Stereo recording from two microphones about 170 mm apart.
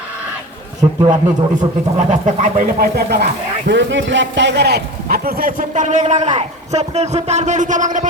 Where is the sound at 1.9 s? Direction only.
50° right (ahead or behind).